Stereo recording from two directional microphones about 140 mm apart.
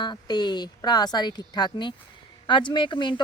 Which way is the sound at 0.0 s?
30° left (ahead or behind).